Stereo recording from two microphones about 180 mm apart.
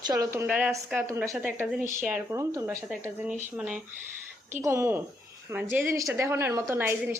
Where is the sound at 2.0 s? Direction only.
10° right (ahead or behind).